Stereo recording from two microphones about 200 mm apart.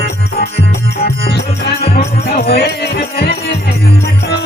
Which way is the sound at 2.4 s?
55° left (ahead or behind).